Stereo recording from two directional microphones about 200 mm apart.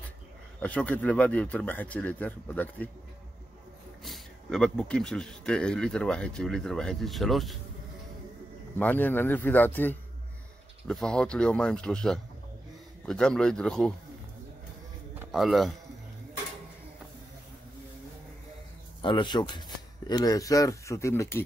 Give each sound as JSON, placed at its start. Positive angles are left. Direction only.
{"t": 0.6, "sound": "speech", "side_deg": 5}
{"t": 4.0, "sound": "speech", "side_deg": 0}
{"t": 8.7, "sound": "speech", "side_deg": 10}
{"t": 15.1, "sound": "speech", "side_deg": 0}
{"t": 18.9, "sound": "a man's voice", "side_deg": 25}